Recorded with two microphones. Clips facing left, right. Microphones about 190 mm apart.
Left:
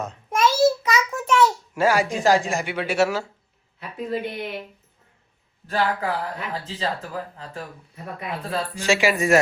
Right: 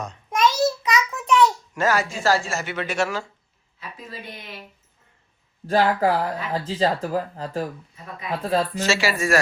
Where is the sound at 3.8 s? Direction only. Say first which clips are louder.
Left 11 dB; 60° left (ahead or behind).